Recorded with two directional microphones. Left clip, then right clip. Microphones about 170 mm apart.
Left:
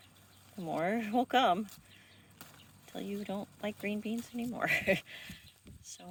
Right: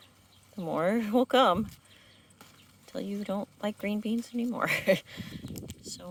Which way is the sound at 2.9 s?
40° right (ahead or behind).